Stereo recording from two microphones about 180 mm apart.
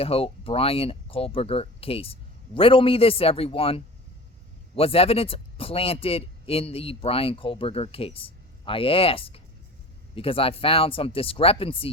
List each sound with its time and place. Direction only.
0.0 s speech: 30° left (ahead or behind)